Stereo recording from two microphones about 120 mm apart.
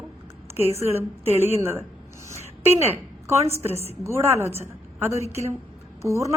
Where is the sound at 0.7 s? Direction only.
20° right (ahead or behind).